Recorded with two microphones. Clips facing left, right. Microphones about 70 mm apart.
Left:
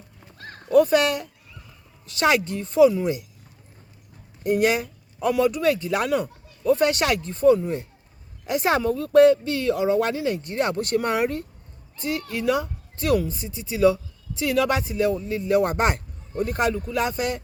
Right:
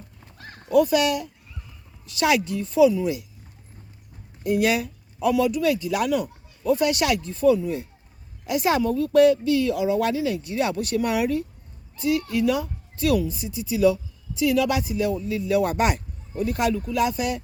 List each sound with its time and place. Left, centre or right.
0.3 s horse: centre
0.7 s a woman's voice: left
4.4 s a woman's voice: left